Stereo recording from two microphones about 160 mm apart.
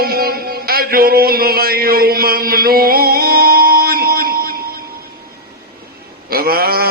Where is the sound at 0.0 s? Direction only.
70° right (ahead or behind).